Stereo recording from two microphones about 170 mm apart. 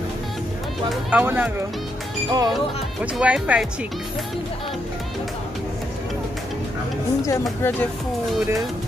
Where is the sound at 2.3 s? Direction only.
25° right (ahead or behind).